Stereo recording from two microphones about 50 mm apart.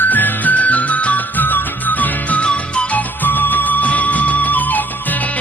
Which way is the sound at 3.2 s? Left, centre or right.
Left.